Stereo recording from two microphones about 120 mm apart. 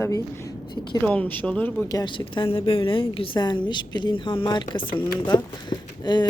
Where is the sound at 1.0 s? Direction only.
10° left (ahead or behind).